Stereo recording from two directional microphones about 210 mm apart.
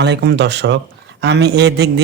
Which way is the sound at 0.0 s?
55° right (ahead or behind).